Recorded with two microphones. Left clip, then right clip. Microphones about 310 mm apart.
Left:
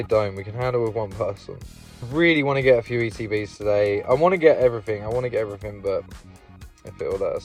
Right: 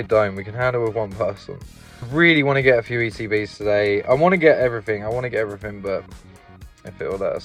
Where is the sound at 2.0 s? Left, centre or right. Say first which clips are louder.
Right 3 dB; centre.